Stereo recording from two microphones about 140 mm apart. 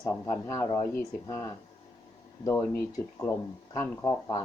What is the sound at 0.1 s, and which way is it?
Speech, 20° left (ahead or behind).